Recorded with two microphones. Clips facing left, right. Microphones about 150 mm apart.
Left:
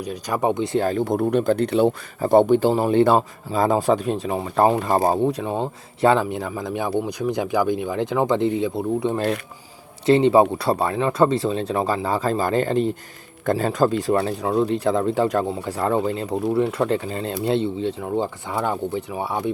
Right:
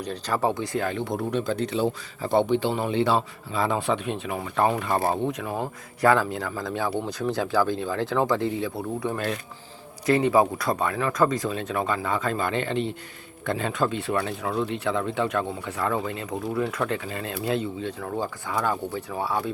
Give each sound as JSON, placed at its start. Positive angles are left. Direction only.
{"t": 0.0, "sound": "speech", "side_deg": 15}
{"t": 0.9, "sound": "speech", "side_deg": 45}